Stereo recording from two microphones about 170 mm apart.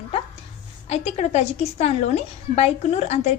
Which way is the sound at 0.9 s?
40° left (ahead or behind).